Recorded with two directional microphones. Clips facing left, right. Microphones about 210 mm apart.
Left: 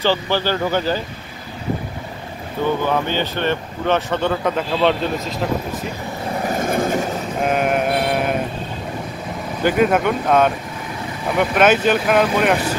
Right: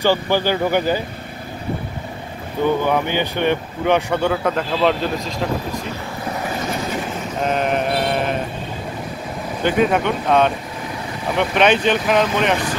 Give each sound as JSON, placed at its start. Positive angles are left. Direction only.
{"t": 0.0, "sound": "speech", "side_deg": -15}
{"t": 2.9, "sound": "speech", "side_deg": -15}
{"t": 6.6, "sound": "train", "side_deg": 50}
{"t": 7.4, "sound": "sheep", "side_deg": 10}
{"t": 9.6, "sound": "speech", "side_deg": 5}